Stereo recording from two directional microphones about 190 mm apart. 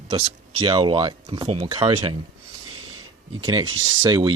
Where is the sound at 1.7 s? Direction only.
20° right (ahead or behind).